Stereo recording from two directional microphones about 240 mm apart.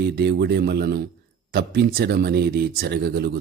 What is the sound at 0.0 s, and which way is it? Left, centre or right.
A man's voice, right.